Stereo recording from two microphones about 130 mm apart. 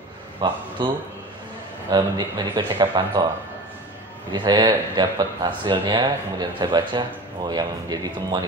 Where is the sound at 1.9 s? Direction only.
35° right (ahead or behind).